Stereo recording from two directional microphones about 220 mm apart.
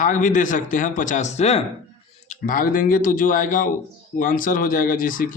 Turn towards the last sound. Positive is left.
turn(degrees=40)  # may be behind; listen again after turning